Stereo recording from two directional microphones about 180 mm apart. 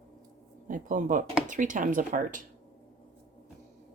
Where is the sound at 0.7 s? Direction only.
45° right (ahead or behind).